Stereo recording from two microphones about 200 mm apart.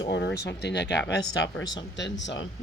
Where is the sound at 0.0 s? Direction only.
60° left (ahead or behind).